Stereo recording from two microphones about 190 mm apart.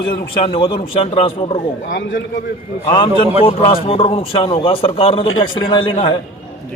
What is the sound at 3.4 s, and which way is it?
A man's voice, 30° left (ahead or behind).